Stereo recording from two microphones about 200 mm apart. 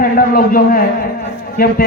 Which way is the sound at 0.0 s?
45° left (ahead or behind).